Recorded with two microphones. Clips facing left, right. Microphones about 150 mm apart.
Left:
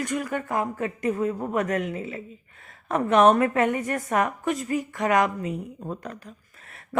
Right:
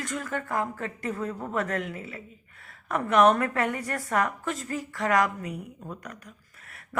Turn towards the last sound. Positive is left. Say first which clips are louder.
# left 6 dB
turn(degrees=25)  # may be behind; listen again after turning